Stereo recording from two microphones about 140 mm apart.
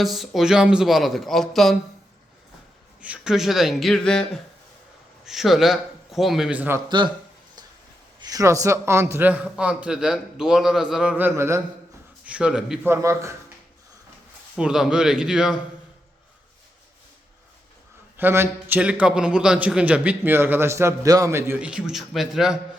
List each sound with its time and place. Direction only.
0.0 s speech: centre (ahead or behind)
3.0 s speech: 5° right (ahead or behind)
6.8 s speech: 35° right (ahead or behind)
8.2 s a man's voice: 25° right (ahead or behind)
12.2 s a man's voice: 10° right (ahead or behind)
12.8 s a man's voice: 20° right (ahead or behind)
14.5 s speech: 5° right (ahead or behind)
18.2 s a man's voice: 15° right (ahead or behind)